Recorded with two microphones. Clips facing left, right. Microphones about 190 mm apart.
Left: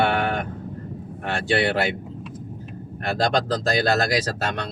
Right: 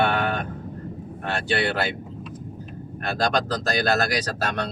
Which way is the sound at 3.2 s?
30° left (ahead or behind).